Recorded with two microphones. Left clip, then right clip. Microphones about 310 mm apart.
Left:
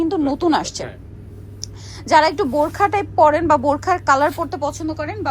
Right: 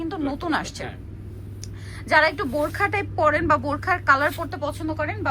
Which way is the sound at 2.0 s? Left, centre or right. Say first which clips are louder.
Left 5 dB; centre.